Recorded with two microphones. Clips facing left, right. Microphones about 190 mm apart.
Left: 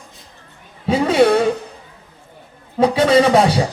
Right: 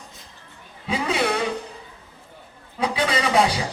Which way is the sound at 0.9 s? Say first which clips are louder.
Left 10 dB; 40° left (ahead or behind).